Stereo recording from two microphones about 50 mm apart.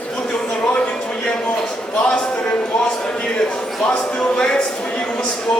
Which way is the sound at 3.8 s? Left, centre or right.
Centre.